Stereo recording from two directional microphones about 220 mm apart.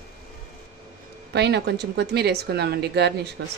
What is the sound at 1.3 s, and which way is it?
A woman's voice, 50° right (ahead or behind).